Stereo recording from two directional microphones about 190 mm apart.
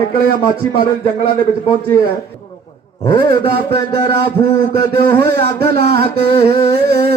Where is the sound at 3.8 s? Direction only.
25° left (ahead or behind).